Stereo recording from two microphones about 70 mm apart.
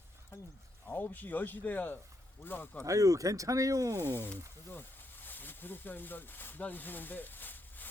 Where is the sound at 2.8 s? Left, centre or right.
Right.